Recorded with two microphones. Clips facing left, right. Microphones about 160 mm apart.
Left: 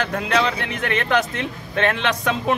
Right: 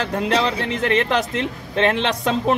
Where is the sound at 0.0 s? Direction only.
30° right (ahead or behind).